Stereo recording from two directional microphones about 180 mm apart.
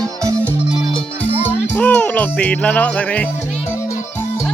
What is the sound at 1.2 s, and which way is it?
Music, 10° left (ahead or behind).